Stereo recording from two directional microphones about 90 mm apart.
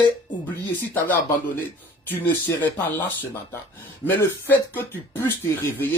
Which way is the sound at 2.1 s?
20° left (ahead or behind).